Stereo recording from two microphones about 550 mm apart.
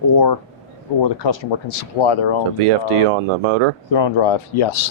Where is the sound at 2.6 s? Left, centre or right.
Right.